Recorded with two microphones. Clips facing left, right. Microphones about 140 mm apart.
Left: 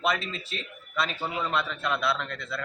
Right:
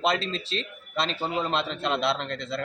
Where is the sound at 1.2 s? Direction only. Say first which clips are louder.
Right 4 dB; 25° right (ahead or behind).